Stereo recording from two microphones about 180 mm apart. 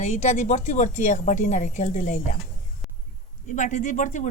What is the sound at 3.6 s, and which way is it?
Speech, 45° left (ahead or behind).